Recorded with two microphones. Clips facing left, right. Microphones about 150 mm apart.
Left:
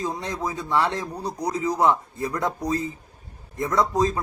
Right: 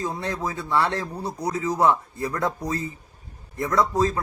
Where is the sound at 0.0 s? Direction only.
15° left (ahead or behind).